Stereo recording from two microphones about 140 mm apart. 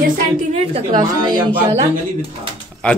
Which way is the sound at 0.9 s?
30° right (ahead or behind).